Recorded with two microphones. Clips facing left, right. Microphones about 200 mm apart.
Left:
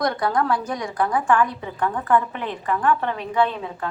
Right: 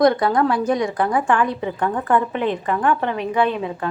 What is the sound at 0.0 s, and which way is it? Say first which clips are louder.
A woman's voice: right 6 dB; 25° right (ahead or behind).